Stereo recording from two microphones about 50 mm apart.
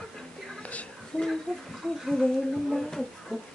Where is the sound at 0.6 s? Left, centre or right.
Left.